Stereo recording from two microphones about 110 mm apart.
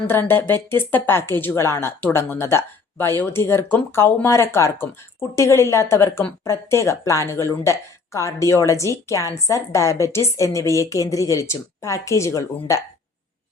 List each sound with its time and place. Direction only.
0.1 s speech: 20° left (ahead or behind)